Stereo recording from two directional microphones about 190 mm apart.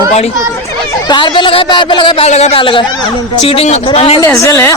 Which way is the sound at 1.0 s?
20° left (ahead or behind).